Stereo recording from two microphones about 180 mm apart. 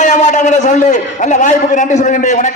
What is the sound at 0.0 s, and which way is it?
A man's voice, 45° left (ahead or behind).